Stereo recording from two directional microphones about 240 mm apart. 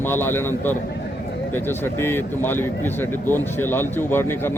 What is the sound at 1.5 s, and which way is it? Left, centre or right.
Speech, centre.